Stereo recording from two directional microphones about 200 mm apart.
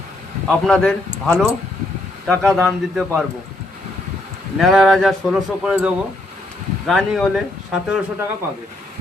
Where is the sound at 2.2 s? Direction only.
Centre (ahead or behind).